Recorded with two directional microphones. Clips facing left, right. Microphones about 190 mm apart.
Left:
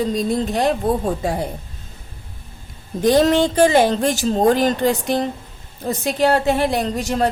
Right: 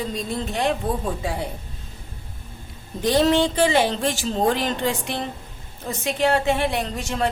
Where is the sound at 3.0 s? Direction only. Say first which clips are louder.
Left 4 dB; 45° left (ahead or behind).